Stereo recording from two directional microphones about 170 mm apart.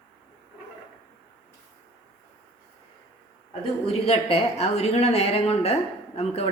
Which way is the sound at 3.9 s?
35° left (ahead or behind).